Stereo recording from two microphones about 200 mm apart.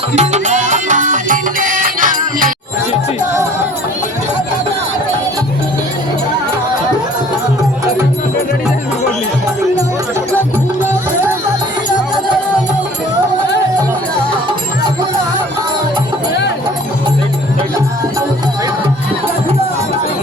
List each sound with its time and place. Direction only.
0.2 s music: 35° right (ahead or behind)